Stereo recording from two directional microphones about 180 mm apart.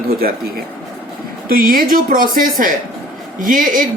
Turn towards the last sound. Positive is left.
turn(degrees=-50)  # may be behind; listen again after turning